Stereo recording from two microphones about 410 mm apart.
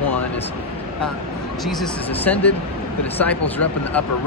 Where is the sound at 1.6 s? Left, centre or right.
Centre.